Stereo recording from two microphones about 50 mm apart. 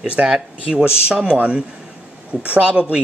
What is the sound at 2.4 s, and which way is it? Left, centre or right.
Speech, right.